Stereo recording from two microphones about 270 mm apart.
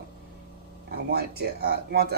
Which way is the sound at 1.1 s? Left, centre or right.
Right.